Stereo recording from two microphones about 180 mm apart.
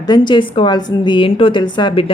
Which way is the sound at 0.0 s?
25° left (ahead or behind).